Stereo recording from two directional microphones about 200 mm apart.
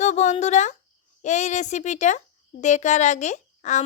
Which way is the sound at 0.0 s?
35° left (ahead or behind).